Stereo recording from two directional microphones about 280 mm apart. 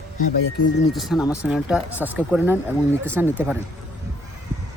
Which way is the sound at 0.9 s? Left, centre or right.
Centre.